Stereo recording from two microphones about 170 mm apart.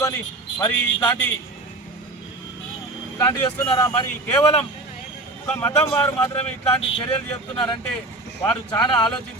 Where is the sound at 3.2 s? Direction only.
20° left (ahead or behind).